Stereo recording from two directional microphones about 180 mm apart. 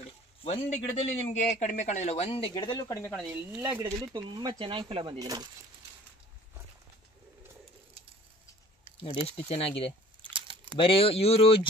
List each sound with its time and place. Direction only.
0.4 s a man's voice: 35° left (ahead or behind); by 3.3 s 10° left (ahead or behind)
3.3 s speech: 10° right (ahead or behind)
4.1 s speech: 25° right (ahead or behind)
9.0 s a man's voice: 30° left (ahead or behind)
10.3 s a sound: 30° right (ahead or behind)
10.8 s a man's voice: 30° left (ahead or behind)